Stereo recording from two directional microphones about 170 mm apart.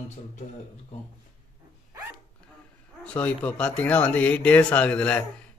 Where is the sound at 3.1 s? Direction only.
10° left (ahead or behind).